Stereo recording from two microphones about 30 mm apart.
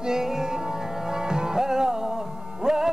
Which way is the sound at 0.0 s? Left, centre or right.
Centre.